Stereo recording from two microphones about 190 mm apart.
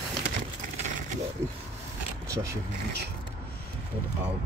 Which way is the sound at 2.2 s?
15° right (ahead or behind).